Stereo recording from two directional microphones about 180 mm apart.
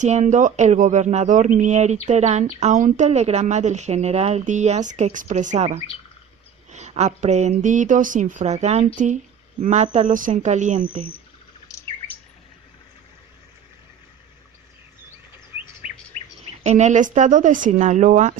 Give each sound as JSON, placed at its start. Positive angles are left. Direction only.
{"t": 0.0, "sound": "speech", "side_deg": -40}
{"t": 11.7, "sound": "bird", "side_deg": 20}
{"t": 16.6, "sound": "speech", "side_deg": -40}